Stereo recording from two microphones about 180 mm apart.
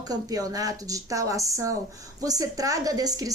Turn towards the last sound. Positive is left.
turn(degrees=-20)  # may be behind; listen again after turning